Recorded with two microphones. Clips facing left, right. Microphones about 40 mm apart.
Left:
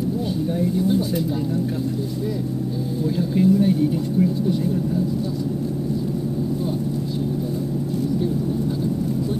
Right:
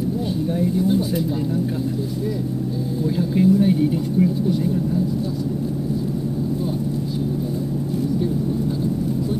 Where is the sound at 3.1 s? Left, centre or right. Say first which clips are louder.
Right 1 dB; centre.